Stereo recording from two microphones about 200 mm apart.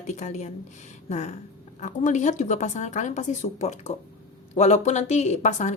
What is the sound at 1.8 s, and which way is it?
A woman's voice, 35° left (ahead or behind).